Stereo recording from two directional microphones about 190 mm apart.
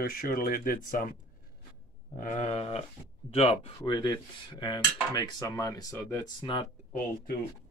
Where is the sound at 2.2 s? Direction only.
40° left (ahead or behind).